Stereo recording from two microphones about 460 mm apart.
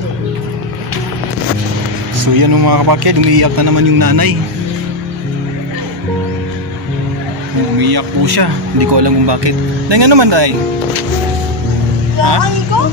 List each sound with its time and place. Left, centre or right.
2.2 s a man's voice: right
7.8 s speech: right
12.2 s speech: right